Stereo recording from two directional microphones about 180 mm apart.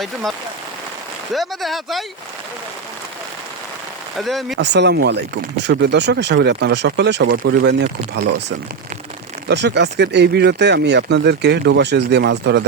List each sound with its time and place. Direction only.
0.0 s speech: centre (ahead or behind)
4.2 s speech: centre (ahead or behind)
4.5 s speech: 70° right (ahead or behind)